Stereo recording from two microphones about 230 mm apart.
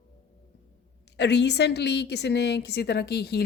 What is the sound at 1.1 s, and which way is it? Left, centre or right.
A woman's voice, left.